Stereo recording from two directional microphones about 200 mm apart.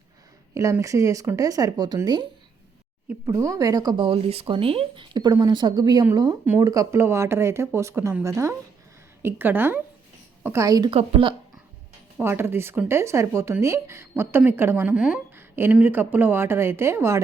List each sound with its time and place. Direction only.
0.5 s speech: 15° right (ahead or behind)
12.1 s speech: 10° right (ahead or behind)